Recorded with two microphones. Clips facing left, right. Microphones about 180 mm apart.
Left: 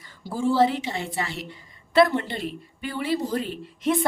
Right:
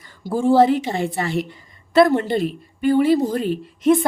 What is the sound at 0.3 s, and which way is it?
A woman's voice, 50° right (ahead or behind).